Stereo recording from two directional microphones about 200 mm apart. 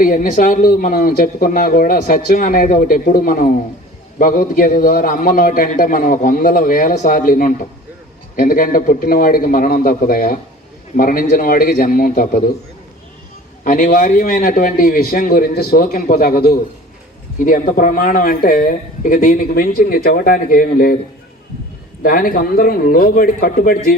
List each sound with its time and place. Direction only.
0.0 s speech: 45° left (ahead or behind)
13.7 s speech: 45° left (ahead or behind)
22.0 s speech: 45° left (ahead or behind)